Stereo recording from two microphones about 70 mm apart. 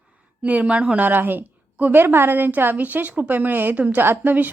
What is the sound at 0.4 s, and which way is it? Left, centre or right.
A woman's voice, centre.